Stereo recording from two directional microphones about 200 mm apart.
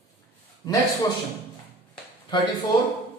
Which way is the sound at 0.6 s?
20° left (ahead or behind).